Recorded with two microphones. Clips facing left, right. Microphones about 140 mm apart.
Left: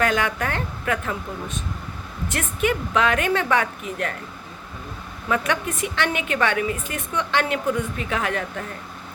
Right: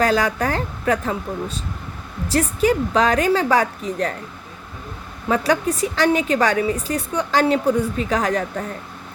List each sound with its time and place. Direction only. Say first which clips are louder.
0.0 s a woman's voice: right 4 dB; 35° right (ahead or behind)
5.3 s a woman's voice: right 5 dB; 35° right (ahead or behind)